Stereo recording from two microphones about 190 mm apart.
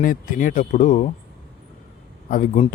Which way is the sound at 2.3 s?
40° left (ahead or behind).